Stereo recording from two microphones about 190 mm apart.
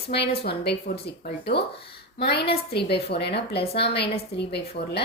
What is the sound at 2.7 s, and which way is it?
Speech, 60° left (ahead or behind).